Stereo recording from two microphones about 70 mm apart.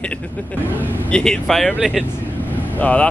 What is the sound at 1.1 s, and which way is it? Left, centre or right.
Speech, centre.